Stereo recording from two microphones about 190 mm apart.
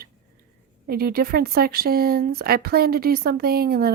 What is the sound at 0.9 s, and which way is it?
Speech, 55° right (ahead or behind).